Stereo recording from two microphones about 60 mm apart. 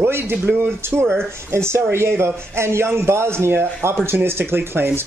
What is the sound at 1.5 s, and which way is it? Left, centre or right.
Speech, right.